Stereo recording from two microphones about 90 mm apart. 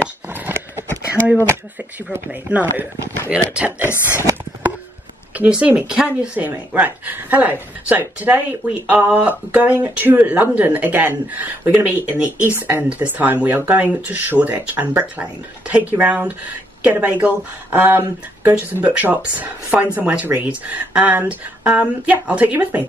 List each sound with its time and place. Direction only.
0.0 s a sound: 25° right (ahead or behind)
2.1 s speech: 20° right (ahead or behind)
3.9 s speech: 30° left (ahead or behind)
5.4 s speech: 15° right (ahead or behind)